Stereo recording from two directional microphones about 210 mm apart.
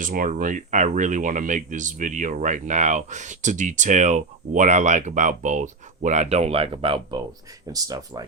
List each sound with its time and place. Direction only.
0.0 s speech: 40° right (ahead or behind); by 8.3 s 20° right (ahead or behind)